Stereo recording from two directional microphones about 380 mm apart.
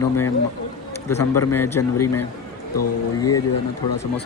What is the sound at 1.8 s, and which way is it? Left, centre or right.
Mantra, left.